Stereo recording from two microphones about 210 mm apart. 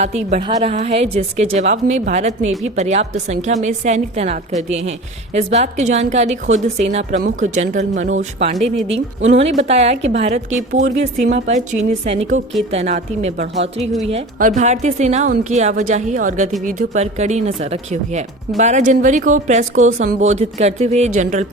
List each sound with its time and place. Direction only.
0.0 s speech: 35° right (ahead or behind)
12.7 s speech: 30° right (ahead or behind)